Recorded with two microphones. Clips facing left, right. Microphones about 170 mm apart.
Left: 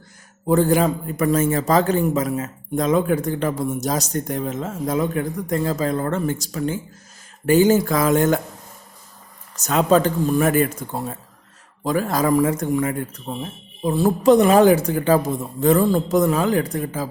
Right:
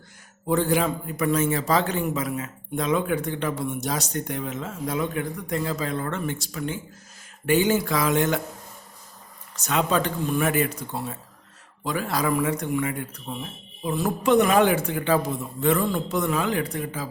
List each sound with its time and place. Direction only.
0.4 s a man's voice: 45° left (ahead or behind)
9.6 s a man's voice: 40° left (ahead or behind)